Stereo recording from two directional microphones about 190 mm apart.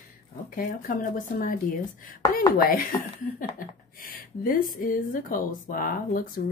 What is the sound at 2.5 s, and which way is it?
Speech, 50° left (ahead or behind).